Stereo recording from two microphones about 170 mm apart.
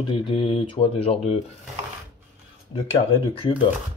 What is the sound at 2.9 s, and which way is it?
Speech, 35° left (ahead or behind).